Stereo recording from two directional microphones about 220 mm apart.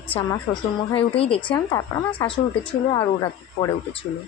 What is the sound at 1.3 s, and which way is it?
Speech, 20° left (ahead or behind).